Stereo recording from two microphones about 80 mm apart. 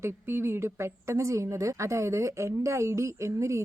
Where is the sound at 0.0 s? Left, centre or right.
Right.